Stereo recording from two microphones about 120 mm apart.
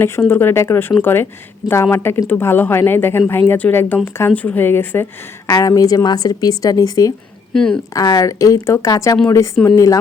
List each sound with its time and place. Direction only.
0.0 s speech: 20° left (ahead or behind)
5.5 s speech: 30° left (ahead or behind)
7.5 s speech: 5° left (ahead or behind)
7.9 s speech: 30° left (ahead or behind)